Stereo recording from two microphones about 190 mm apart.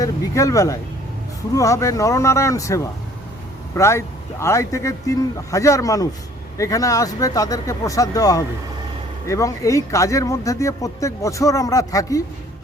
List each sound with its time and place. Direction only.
0.0 s speech: 15° left (ahead or behind)